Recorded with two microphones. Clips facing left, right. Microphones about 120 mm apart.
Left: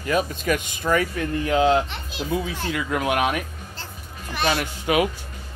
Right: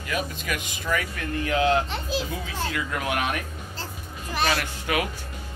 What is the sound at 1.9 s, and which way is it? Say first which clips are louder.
Speech: left 1 dB; 35° right (ahead or behind).